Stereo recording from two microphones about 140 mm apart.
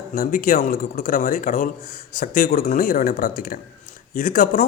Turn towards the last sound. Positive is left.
turn(degrees=85)